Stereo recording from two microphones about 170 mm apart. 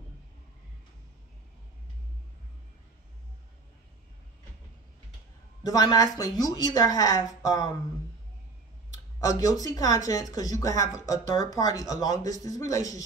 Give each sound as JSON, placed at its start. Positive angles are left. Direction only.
{"t": 5.6, "sound": "a woman's voice", "side_deg": 20}
{"t": 9.2, "sound": "a woman's voice", "side_deg": 20}